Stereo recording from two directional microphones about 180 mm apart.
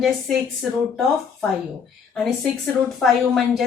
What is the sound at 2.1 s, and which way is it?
A woman's voice, centre (ahead or behind).